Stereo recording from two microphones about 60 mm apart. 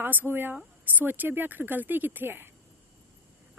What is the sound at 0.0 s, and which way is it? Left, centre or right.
Speech, right.